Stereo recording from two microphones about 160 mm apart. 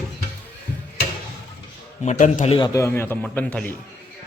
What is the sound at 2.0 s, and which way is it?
Speech, 50° left (ahead or behind).